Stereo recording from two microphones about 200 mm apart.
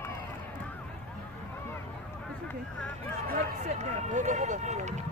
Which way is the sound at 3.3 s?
35° right (ahead or behind).